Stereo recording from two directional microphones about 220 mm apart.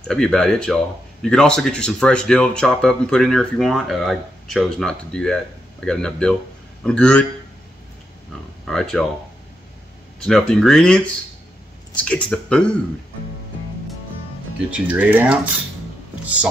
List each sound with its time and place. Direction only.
0.0 s speech: 5° left (ahead or behind)
8.6 s speech: 5° left (ahead or behind)
10.2 s speech: 5° left (ahead or behind)
14.7 s speech: 5° right (ahead or behind)